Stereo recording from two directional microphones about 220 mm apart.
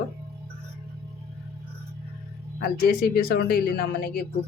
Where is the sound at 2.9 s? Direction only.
45° left (ahead or behind).